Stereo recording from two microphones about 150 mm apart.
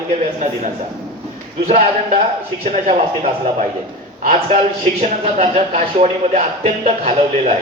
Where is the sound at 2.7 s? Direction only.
45° right (ahead or behind).